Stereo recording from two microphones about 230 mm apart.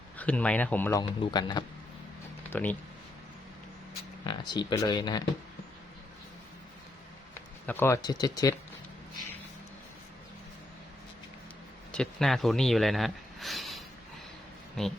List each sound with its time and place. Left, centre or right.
0.2 s a man's voice: centre
2.5 s speech: centre
4.2 s speech: centre
7.7 s speech: centre
11.9 s speech: centre